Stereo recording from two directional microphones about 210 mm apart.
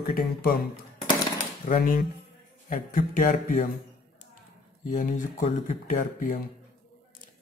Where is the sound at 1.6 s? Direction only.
40° left (ahead or behind).